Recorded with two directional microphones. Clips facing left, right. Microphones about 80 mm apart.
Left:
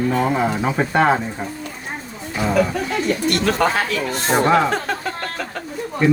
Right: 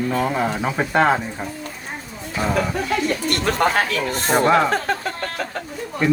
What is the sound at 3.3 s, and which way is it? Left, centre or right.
Speech, right.